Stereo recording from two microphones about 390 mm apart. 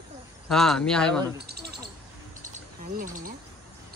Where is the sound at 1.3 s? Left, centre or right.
Right.